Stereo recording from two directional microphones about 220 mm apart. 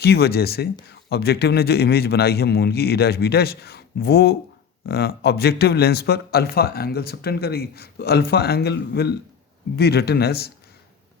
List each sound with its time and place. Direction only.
0.0 s speech: 45° left (ahead or behind)